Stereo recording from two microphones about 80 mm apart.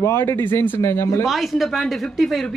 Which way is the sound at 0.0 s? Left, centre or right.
Left.